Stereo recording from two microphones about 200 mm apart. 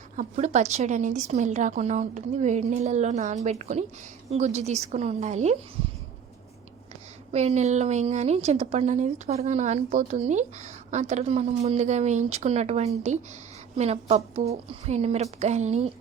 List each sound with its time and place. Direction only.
0.2 s a woman's voice: 35° right (ahead or behind)
7.3 s a woman's voice: 35° right (ahead or behind)